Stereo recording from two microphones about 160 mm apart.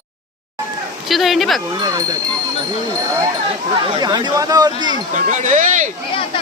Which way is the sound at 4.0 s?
25° right (ahead or behind).